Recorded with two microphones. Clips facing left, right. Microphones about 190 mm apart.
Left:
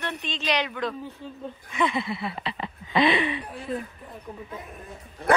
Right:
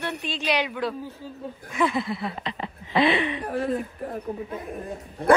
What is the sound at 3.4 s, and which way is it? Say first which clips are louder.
Speech: right 6 dB; 60° right (ahead or behind).